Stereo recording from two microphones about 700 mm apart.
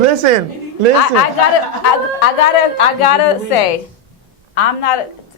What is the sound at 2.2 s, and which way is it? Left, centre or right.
A woman's voice, left.